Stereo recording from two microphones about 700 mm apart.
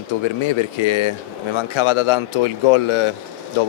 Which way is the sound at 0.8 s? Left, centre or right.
Left.